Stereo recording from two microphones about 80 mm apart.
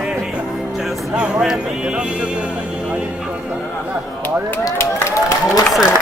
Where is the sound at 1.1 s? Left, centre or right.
Centre.